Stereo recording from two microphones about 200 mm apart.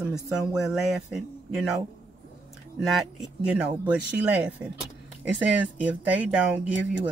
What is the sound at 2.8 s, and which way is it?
Speech, centre (ahead or behind).